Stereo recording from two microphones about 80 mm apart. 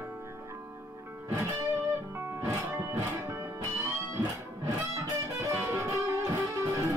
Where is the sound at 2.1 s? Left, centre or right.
Right.